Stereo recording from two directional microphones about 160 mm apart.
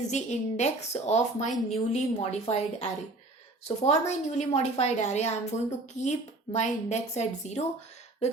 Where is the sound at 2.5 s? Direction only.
40° left (ahead or behind).